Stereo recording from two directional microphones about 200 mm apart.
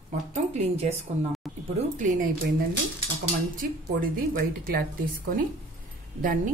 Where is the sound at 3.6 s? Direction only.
45° right (ahead or behind).